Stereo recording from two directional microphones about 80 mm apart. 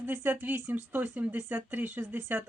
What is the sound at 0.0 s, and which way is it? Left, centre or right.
Speech, right.